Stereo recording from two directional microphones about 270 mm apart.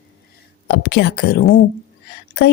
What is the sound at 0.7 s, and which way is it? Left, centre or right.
Speech, left.